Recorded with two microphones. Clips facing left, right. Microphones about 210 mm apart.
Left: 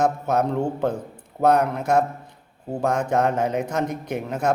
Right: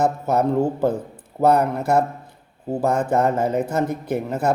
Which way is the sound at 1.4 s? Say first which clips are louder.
Right 2 dB; 5° right (ahead or behind).